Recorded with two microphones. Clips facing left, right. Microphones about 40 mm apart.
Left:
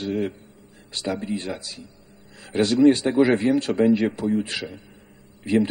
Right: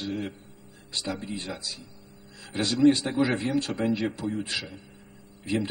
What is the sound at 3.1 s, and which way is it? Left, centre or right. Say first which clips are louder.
A man's voice: left 7 dB; left.